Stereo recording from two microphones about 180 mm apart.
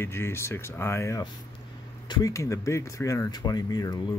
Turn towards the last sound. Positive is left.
turn(degrees=20)  # may be behind; listen again after turning